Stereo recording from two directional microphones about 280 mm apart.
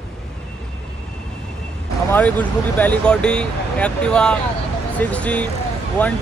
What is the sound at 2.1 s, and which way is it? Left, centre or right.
Speech, centre.